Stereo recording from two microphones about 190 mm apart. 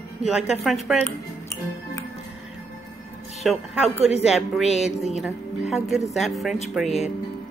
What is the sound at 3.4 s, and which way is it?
Speech, centre (ahead or behind).